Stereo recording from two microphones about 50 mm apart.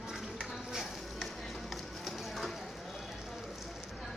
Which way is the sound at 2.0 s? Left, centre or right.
Centre.